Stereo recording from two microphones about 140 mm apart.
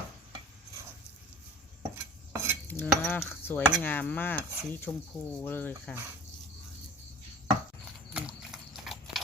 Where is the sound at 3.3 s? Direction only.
15° left (ahead or behind).